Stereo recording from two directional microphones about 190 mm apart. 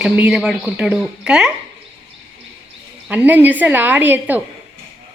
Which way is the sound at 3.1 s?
10° right (ahead or behind).